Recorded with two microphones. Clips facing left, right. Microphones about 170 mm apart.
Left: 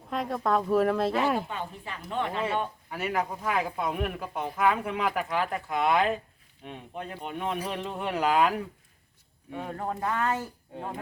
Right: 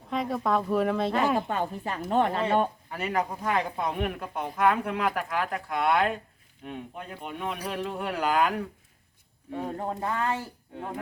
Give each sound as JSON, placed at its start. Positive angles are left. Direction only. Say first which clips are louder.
{"t": 0.1, "sound": "speech", "louder": "even", "side_deg": 0}
{"t": 1.4, "sound": "a woman's voice", "louder": "right 5 dB", "side_deg": -45}
{"t": 2.9, "sound": "speech", "louder": "right 1 dB", "side_deg": 0}
{"t": 9.6, "sound": "speech", "louder": "even", "side_deg": -20}